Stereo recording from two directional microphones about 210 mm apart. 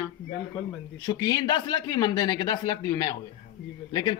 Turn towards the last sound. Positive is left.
turn(degrees=20)  # may be behind; listen again after turning